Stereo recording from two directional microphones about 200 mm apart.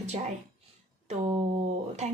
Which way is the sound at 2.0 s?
35° right (ahead or behind).